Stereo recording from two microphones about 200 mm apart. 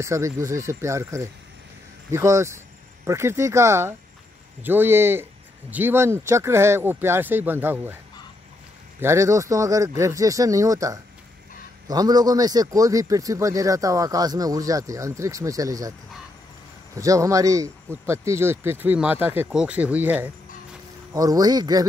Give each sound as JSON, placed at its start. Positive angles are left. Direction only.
{"t": 0.0, "sound": "speech", "side_deg": -15}
{"t": 9.0, "sound": "speech", "side_deg": -15}
{"t": 16.9, "sound": "speech", "side_deg": -15}